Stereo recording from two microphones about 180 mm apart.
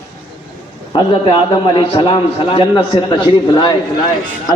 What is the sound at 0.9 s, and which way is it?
A man's voice, 25° left (ahead or behind).